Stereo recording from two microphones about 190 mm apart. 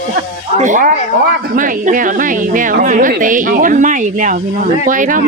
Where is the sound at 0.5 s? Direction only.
40° right (ahead or behind).